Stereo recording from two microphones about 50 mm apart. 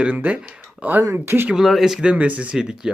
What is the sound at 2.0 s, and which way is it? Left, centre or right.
Speech, right.